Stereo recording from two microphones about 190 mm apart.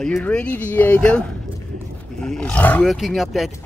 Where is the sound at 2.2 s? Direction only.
5° left (ahead or behind).